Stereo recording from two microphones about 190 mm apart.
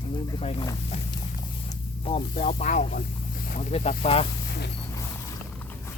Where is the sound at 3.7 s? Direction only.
30° left (ahead or behind).